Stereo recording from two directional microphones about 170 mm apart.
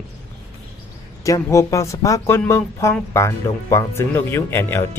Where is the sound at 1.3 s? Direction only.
20° left (ahead or behind).